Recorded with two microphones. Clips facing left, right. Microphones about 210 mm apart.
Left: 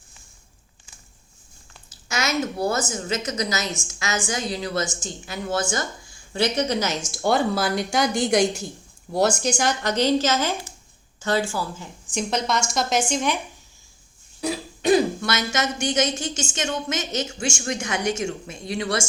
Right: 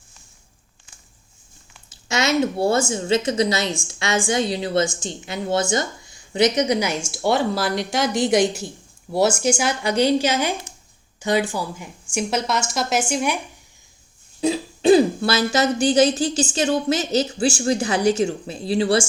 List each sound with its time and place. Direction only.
1.9 s a woman's voice: 25° right (ahead or behind); by 13.4 s 10° right (ahead or behind)
14.4 s speech: 25° right (ahead or behind)